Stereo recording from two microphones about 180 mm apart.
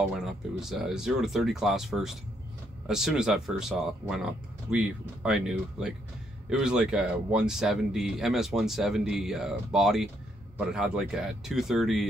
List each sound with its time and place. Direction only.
0.1 s speech: 5° right (ahead or behind)